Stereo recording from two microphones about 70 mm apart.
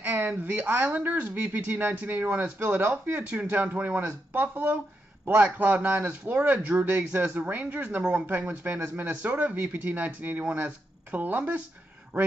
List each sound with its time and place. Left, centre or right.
0.0 s speech: right